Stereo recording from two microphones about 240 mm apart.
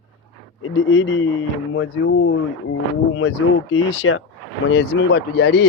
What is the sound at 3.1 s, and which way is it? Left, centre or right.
Speech, left.